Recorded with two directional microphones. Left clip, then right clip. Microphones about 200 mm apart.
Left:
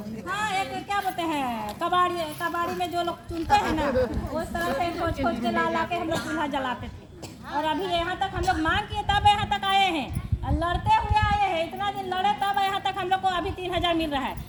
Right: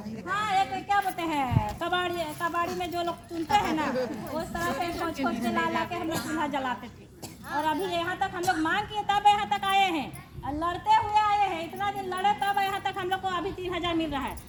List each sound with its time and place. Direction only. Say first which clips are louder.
0.3 s a sound: right 2 dB; 25° left (ahead or behind)
1.8 s speech: left 7 dB; 10° left (ahead or behind)
7.5 s a woman's voice: left 1 dB; 10° right (ahead or behind)
7.9 s speech: left 3 dB; 10° left (ahead or behind)
8.4 s a woman's voice: left 2 dB; 15° right (ahead or behind)
8.6 s a woman's voice: left 2 dB; 15° left (ahead or behind); by 14.3 s 40° left (ahead or behind)